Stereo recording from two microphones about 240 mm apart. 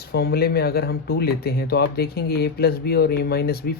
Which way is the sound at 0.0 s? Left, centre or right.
Left.